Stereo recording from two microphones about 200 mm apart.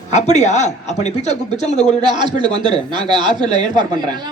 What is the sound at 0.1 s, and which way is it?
Speech, 35° left (ahead or behind).